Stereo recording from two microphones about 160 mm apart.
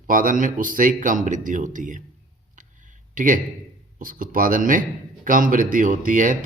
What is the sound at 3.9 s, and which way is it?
A man's voice, 60° right (ahead or behind).